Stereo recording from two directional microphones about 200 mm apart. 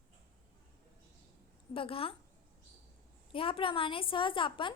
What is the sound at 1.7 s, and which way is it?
Speech, 25° left (ahead or behind).